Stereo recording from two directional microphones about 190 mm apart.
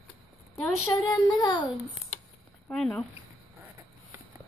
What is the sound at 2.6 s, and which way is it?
Speech, 5° left (ahead or behind).